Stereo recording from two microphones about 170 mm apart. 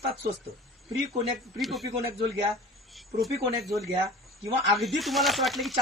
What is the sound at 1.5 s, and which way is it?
Speech, centre (ahead or behind).